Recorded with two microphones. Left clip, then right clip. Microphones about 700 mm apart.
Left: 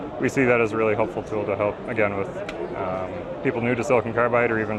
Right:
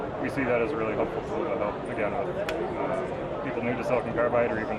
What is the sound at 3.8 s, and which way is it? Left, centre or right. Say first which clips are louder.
Speech: left 5 dB; left.